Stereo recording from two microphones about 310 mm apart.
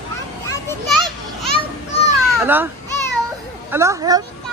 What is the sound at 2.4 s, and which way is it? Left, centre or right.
A woman's voice, centre.